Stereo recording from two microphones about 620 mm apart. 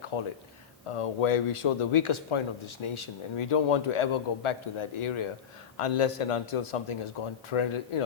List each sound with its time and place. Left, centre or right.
0.1 s a man's voice: left